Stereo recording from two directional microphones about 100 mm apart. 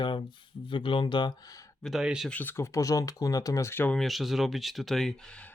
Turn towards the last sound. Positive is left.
turn(degrees=0)  # may be behind; listen again after turning